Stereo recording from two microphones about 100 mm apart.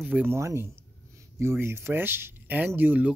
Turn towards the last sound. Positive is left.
turn(degrees=-20)  # may be behind; listen again after turning